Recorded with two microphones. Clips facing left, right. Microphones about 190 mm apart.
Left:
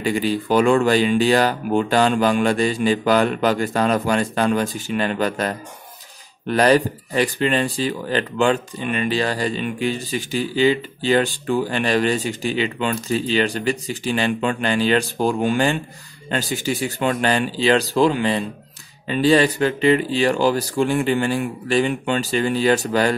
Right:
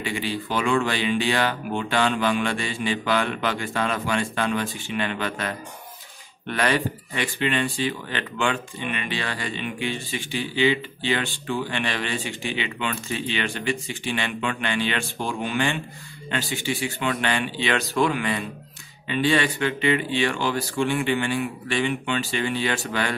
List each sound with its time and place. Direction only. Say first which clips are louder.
0.0 s speech: left 7 dB; 40° left (ahead or behind)